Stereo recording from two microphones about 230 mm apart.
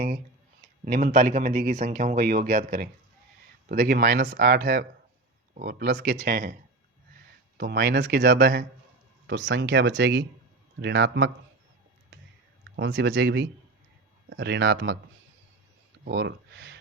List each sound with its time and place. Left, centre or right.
0.9 s speech: right
7.6 s speech: right
12.7 s speech: right
16.0 s speech: right